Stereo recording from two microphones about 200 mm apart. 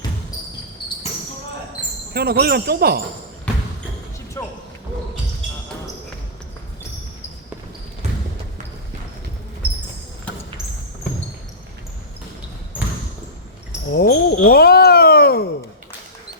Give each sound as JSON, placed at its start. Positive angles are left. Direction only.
{"t": 2.1, "sound": "speech", "side_deg": -50}
{"t": 4.4, "sound": "basketball bounce", "side_deg": 10}
{"t": 13.9, "sound": "a sound", "side_deg": 50}